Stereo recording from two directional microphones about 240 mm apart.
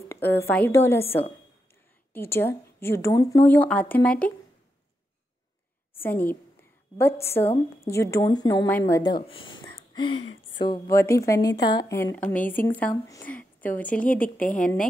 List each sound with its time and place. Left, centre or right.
0.1 s speech: centre
5.9 s speech: centre
9.8 s a sound: left
10.6 s a woman's voice: centre